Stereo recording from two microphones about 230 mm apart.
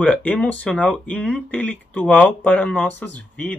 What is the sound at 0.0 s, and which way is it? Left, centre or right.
Speech, centre.